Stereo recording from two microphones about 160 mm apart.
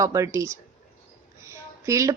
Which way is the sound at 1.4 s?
20° right (ahead or behind).